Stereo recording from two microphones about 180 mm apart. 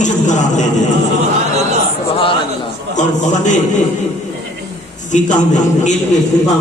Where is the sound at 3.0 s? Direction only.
40° left (ahead or behind).